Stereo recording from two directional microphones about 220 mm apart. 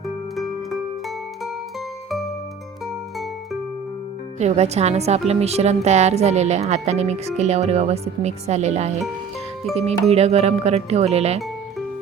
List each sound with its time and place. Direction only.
2.0 s music: centre (ahead or behind)
4.4 s speech: 30° right (ahead or behind)
9.7 s speech: centre (ahead or behind)
10.1 s speech: 30° right (ahead or behind)